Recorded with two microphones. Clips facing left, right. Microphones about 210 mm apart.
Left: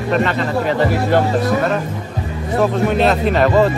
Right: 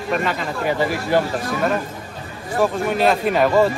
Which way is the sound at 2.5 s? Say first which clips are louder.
Left 4 dB; 5° right (ahead or behind).